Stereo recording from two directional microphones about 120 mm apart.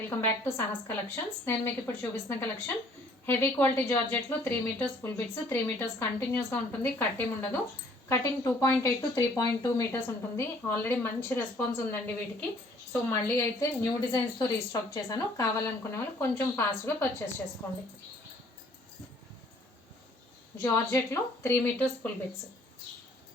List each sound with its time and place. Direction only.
0.2 s a woman's voice: 20° left (ahead or behind)
20.6 s speech: 25° left (ahead or behind)